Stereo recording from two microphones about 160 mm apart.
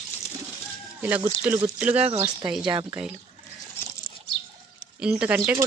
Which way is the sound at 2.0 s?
40° right (ahead or behind).